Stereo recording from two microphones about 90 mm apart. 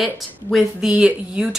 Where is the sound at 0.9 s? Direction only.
10° right (ahead or behind).